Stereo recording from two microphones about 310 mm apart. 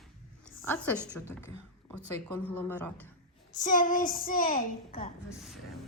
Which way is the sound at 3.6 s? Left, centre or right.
Left.